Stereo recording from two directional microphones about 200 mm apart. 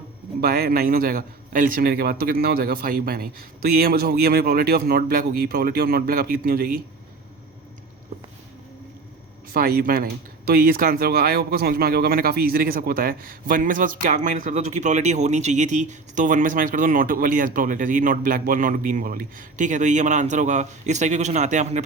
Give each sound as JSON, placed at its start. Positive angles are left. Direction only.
{"t": 0.4, "sound": "speech", "side_deg": -50}
{"t": 9.5, "sound": "speech", "side_deg": -50}